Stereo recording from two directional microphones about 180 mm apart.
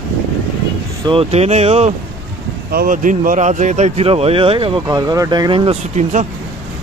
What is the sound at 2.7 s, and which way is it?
Speech, 50° right (ahead or behind).